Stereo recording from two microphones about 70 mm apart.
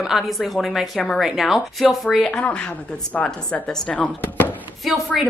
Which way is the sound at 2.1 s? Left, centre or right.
Centre.